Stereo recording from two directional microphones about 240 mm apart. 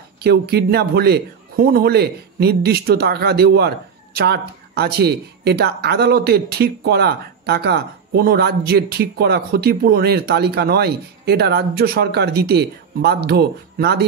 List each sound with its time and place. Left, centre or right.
0.2 s a man's voice: right